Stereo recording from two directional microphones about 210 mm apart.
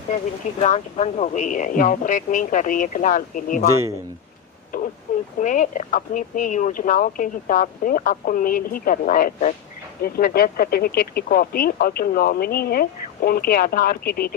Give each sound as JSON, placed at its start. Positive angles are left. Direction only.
{"t": 0.6, "sound": "speech", "side_deg": 30}
{"t": 4.7, "sound": "a sound", "side_deg": 40}
{"t": 5.4, "sound": "speech", "side_deg": 40}